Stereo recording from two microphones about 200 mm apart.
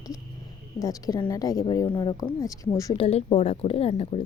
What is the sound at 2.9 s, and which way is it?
A woman's voice, 30° left (ahead or behind).